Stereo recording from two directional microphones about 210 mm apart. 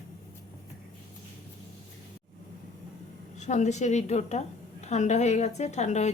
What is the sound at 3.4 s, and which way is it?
A woman's voice, 35° left (ahead or behind).